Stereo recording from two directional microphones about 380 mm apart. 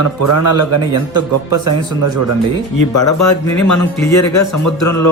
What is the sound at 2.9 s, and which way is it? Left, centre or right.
Speech, left.